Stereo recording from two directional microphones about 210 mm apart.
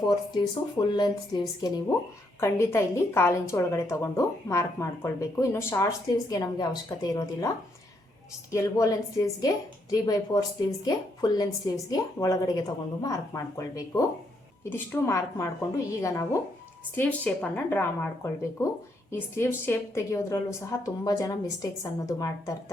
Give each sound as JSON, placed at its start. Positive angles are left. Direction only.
{"t": 0.3, "sound": "a woman's voice", "side_deg": 20}
{"t": 8.5, "sound": "a woman's voice", "side_deg": 15}